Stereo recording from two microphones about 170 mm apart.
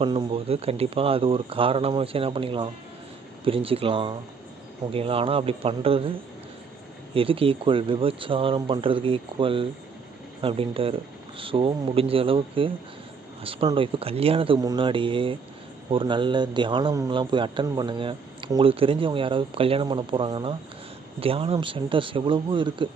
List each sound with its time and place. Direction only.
0.0 s a man's voice: 30° right (ahead or behind)